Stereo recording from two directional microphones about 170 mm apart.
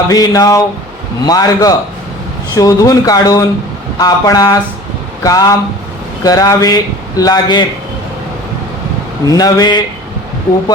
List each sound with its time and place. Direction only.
0.1 s speech: 20° left (ahead or behind)
9.2 s speech: 20° left (ahead or behind)